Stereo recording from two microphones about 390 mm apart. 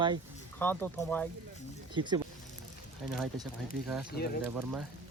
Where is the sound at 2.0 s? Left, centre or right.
Centre.